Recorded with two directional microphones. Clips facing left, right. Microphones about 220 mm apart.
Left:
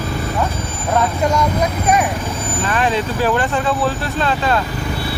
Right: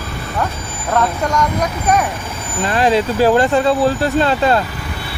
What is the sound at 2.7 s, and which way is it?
Speech, 35° right (ahead or behind).